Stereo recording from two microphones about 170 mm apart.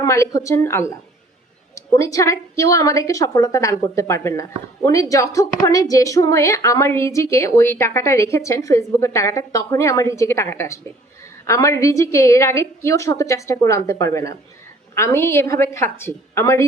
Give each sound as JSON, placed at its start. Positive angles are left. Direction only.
{"t": 0.0, "sound": "a woman's voice", "side_deg": 20}